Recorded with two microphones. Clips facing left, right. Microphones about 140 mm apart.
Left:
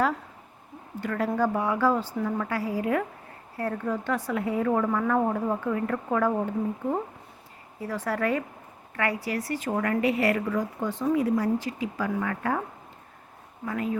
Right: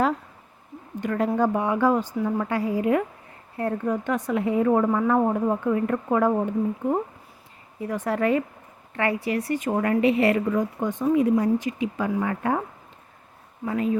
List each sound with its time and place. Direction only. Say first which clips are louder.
0.9 s a woman's voice: right 3 dB; 20° right (ahead or behind)
7.8 s a woman's voice: right 4 dB; 20° right (ahead or behind)
13.7 s a woman's voice: right 5 dB; 20° right (ahead or behind)